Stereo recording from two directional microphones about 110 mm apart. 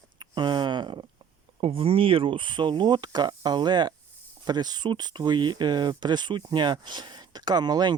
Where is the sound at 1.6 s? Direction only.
60° right (ahead or behind).